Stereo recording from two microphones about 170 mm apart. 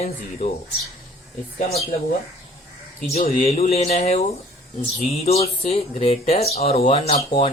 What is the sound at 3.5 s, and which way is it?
Speech, 35° left (ahead or behind).